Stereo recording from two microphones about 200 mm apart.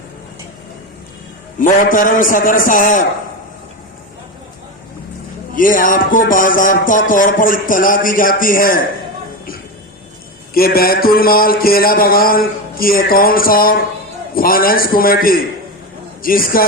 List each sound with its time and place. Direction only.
1.5 s a man's voice: 45° left (ahead or behind)
5.5 s a man's voice: 45° left (ahead or behind)
10.5 s a man's voice: 50° left (ahead or behind)